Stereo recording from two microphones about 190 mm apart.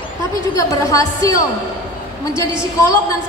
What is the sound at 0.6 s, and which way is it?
Speech, 15° left (ahead or behind).